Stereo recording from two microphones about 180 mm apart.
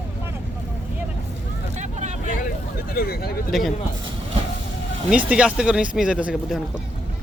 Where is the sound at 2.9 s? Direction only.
60° left (ahead or behind).